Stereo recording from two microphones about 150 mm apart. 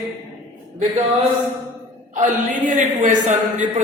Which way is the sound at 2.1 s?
60° right (ahead or behind).